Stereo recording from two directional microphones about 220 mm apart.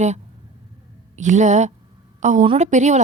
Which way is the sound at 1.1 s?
35° right (ahead or behind).